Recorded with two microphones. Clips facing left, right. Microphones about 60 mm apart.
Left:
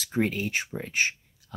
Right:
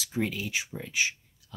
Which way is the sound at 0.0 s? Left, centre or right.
Left.